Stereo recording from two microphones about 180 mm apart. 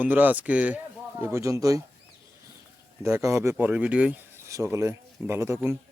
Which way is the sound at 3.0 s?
15° right (ahead or behind).